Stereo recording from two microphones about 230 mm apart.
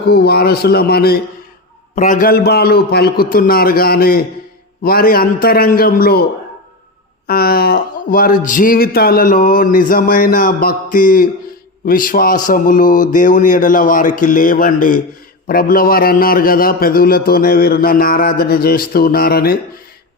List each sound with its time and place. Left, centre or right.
0.1 s a man's voice: left
7.3 s a man's voice: left